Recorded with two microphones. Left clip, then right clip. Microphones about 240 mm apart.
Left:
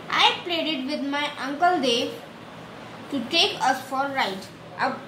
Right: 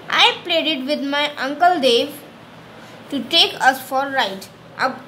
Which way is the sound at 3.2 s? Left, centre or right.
Right.